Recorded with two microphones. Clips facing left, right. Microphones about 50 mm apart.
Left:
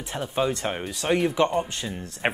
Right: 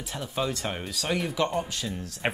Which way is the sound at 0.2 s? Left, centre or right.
Centre.